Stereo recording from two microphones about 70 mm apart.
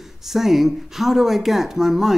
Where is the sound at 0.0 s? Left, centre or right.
Centre.